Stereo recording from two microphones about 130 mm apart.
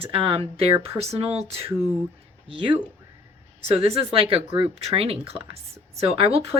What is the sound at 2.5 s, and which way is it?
Speech, 40° right (ahead or behind).